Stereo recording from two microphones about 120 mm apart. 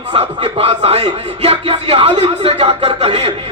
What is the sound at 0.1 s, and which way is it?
Speech, 45° right (ahead or behind).